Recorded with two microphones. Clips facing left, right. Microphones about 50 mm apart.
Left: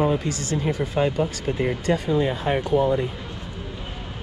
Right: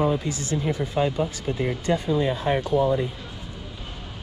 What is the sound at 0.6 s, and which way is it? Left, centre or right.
Speech, left.